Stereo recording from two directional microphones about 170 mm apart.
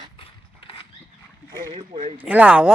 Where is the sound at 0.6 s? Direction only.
30° left (ahead or behind).